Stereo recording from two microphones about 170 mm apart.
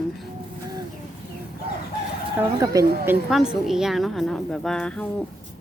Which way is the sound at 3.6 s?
Centre (ahead or behind).